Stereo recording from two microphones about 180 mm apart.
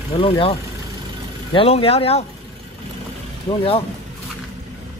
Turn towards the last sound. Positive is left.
turn(degrees=30)  # may be behind; listen again after turning